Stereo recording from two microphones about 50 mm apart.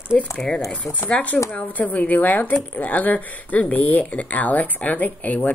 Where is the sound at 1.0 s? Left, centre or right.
Left.